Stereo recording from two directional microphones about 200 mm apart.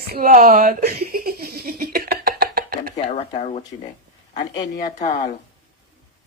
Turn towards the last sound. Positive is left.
turn(degrees=40)  # may be behind; listen again after turning